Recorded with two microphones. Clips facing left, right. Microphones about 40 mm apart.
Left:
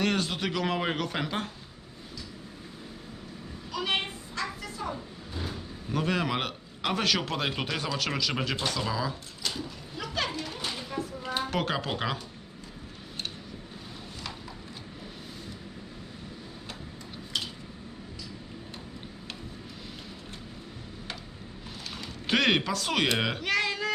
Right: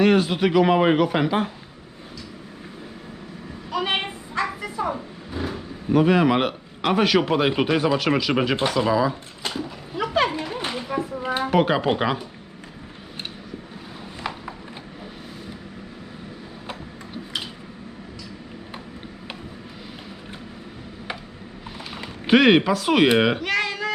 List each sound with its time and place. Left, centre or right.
0.0 s speech: centre
3.7 s vehicle: right
8.5 s speech: right
9.4 s a sound: right
11.5 s speech: centre
14.2 s a sound: right
21.8 s speech: centre
23.4 s cat: centre